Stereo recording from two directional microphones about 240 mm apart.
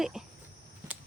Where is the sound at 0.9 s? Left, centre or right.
Centre.